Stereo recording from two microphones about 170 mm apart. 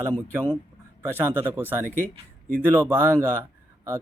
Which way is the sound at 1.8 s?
10° left (ahead or behind).